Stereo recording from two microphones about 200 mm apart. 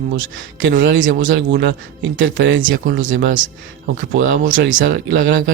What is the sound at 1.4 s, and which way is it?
Speech, 60° right (ahead or behind).